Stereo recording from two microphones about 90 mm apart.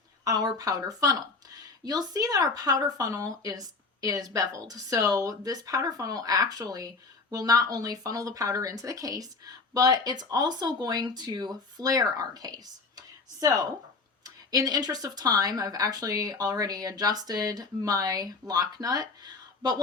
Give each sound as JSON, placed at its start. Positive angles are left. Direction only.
{"t": 0.3, "sound": "speech", "side_deg": -45}